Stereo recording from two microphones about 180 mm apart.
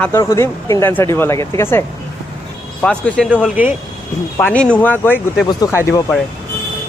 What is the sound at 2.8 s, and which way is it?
Speech, 5° left (ahead or behind).